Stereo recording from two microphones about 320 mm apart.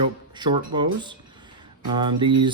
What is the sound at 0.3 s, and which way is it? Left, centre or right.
Speech, centre.